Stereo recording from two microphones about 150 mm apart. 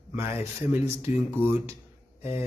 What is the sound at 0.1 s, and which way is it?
A man's voice, 15° right (ahead or behind).